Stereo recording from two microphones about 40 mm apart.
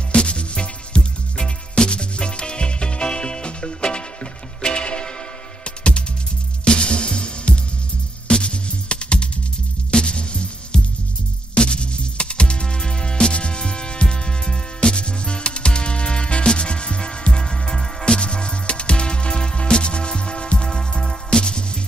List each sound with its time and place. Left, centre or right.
0.1 s music: left
6.6 s music: left